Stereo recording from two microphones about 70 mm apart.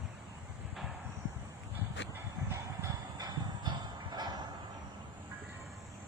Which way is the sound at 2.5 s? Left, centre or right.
Right.